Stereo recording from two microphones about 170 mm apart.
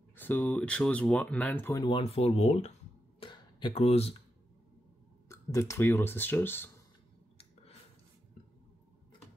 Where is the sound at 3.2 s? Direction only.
25° left (ahead or behind).